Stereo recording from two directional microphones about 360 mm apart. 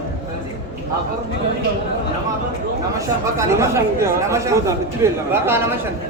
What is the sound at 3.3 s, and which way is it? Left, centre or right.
Speech, centre.